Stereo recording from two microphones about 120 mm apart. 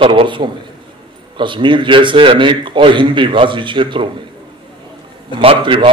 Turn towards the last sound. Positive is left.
turn(degrees=-45)  # may be behind; listen again after turning